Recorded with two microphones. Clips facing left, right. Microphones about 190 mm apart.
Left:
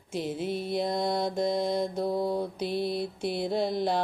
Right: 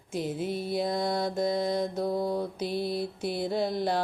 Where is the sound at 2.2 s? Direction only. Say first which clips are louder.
Left 1 dB; 25° left (ahead or behind).